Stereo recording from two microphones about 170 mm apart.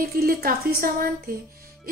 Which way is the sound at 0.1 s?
60° right (ahead or behind).